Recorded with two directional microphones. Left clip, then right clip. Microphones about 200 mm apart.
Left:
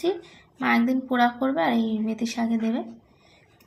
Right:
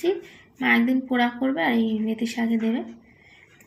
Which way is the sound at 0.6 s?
5° left (ahead or behind).